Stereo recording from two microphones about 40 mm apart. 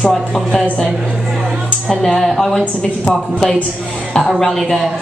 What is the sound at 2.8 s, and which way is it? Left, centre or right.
Speech, left.